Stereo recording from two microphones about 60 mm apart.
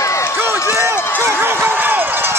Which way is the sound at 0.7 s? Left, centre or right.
Right.